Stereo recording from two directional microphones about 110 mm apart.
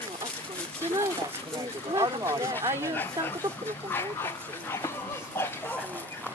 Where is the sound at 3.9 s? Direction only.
20° left (ahead or behind).